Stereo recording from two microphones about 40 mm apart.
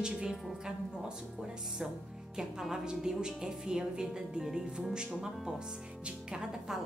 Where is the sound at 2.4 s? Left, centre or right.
Centre.